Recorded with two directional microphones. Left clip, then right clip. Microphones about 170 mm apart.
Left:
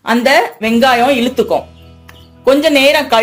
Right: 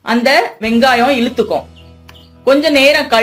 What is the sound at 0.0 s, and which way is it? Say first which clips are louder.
A woman's voice: left 1 dB; 15° left (ahead or behind).